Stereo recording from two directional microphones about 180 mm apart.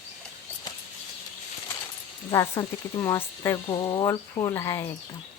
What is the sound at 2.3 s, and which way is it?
Speech, 15° left (ahead or behind).